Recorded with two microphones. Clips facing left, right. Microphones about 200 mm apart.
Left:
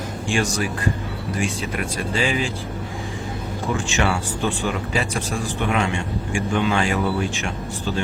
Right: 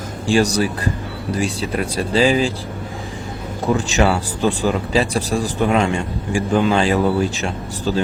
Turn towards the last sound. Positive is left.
turn(degrees=-35)  # may be behind; listen again after turning